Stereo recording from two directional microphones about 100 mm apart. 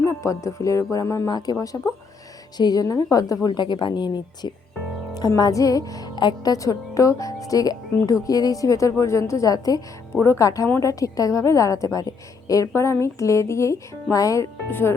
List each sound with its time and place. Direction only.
0.0 s a woman's voice: 30° left (ahead or behind)
1.3 s a woman's voice: 40° left (ahead or behind)
5.4 s a woman's voice: 35° left (ahead or behind)